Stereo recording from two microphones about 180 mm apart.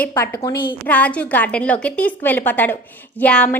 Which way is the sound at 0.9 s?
10° left (ahead or behind).